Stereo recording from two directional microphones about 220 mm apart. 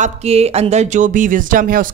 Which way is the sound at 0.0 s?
30° right (ahead or behind).